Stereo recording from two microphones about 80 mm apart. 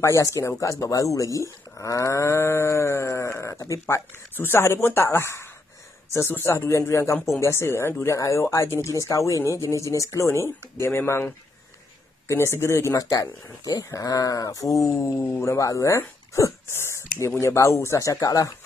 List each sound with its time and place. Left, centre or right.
0.0 s speech: left
13.1 s speech: left